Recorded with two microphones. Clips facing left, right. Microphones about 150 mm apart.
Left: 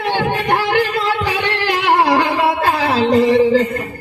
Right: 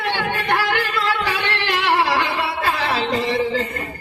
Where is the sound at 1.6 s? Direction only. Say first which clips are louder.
Left 5 dB; 45° left (ahead or behind).